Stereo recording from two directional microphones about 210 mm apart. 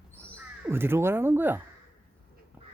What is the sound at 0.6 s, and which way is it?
Speech, 10° right (ahead or behind).